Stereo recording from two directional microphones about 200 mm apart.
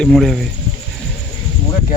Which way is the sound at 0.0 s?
Centre (ahead or behind).